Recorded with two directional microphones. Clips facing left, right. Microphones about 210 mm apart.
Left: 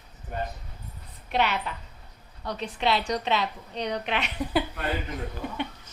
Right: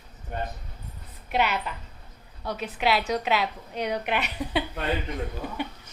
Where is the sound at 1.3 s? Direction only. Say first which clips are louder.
Even; centre (ahead or behind).